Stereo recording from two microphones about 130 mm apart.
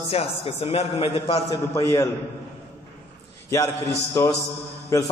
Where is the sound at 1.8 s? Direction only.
25° left (ahead or behind).